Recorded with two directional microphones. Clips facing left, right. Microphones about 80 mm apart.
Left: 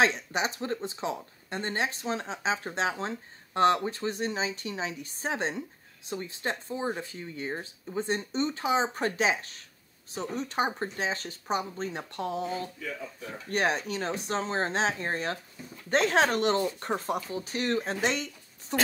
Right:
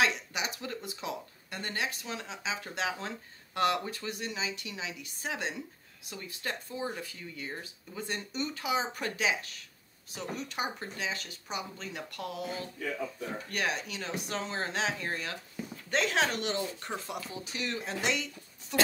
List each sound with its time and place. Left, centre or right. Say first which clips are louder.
0.0 s speech: left 4 dB; left